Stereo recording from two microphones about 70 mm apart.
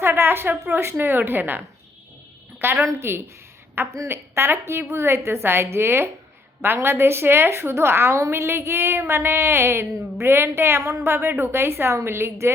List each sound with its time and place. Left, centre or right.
0.0 s a sound: right
0.7 s a woman's voice: right
2.6 s a woman's voice: right